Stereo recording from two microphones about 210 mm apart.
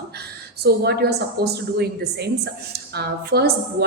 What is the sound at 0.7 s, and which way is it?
Speech, 50° right (ahead or behind).